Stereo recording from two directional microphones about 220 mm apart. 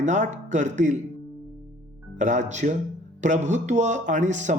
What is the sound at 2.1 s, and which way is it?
Speech, 35° right (ahead or behind).